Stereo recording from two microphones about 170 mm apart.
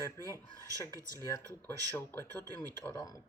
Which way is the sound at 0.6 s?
20° left (ahead or behind).